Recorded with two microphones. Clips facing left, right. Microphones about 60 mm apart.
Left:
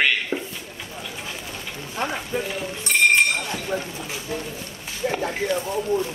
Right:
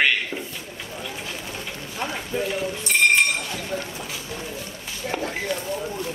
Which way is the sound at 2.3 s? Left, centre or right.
Centre.